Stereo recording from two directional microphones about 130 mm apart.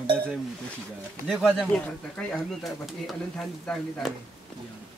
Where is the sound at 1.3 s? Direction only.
5° left (ahead or behind).